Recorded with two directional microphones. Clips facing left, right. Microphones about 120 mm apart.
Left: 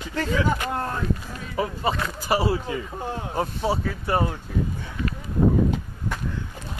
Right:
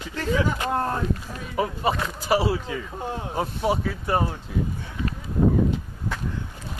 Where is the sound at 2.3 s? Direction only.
5° right (ahead or behind).